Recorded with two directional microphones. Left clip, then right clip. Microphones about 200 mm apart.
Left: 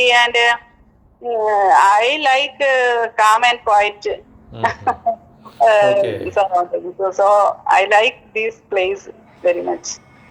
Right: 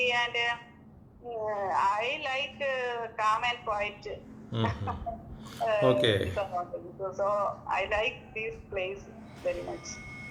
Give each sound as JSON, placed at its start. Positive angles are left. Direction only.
{"t": 0.0, "sound": "a woman's voice", "side_deg": 55}